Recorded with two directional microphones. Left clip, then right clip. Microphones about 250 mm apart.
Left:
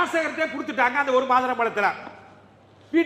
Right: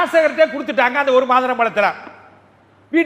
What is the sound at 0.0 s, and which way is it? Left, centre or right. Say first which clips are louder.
A man's voice: right 10 dB; right.